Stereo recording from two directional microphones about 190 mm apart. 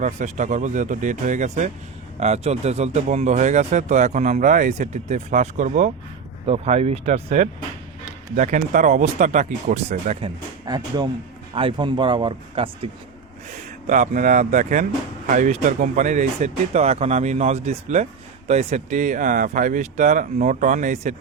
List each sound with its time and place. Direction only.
0.0 s speech: 40° right (ahead or behind)
10.2 s speech: 20° right (ahead or behind)
13.5 s speech: 40° right (ahead or behind)